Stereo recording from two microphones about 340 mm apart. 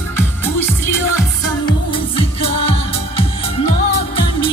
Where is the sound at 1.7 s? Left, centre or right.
Centre.